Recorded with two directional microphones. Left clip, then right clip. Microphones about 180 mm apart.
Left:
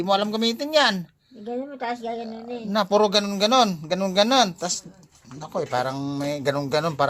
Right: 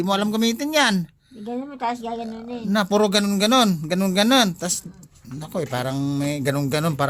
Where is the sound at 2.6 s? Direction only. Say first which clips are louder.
Even; 20° right (ahead or behind).